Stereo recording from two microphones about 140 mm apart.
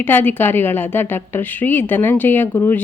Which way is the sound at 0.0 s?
15° left (ahead or behind).